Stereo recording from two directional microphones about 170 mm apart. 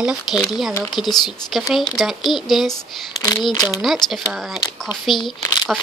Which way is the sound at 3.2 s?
20° left (ahead or behind).